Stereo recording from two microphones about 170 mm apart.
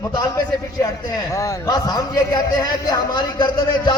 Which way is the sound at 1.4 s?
20° left (ahead or behind).